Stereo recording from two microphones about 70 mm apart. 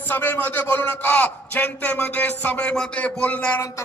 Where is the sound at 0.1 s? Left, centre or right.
Left.